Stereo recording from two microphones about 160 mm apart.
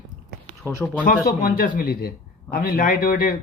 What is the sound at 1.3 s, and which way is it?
A man's voice, 60° left (ahead or behind).